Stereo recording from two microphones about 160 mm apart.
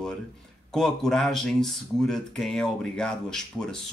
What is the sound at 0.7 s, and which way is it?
Speech, 5° left (ahead or behind).